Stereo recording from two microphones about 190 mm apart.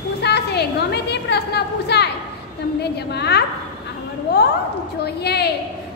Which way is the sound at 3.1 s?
60° left (ahead or behind).